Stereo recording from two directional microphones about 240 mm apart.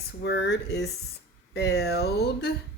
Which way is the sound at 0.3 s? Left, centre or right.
Left.